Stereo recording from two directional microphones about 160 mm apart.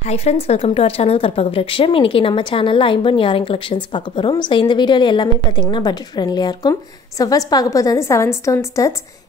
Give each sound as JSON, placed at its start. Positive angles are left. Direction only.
{"t": 0.0, "sound": "speech", "side_deg": 40}